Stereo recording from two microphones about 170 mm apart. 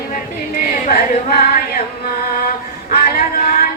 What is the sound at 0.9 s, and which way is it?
Music, 60° left (ahead or behind).